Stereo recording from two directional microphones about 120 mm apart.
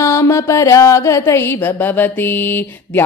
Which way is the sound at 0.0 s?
25° left (ahead or behind).